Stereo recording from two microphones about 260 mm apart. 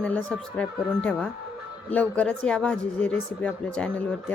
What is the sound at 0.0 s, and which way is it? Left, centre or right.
Speech, centre.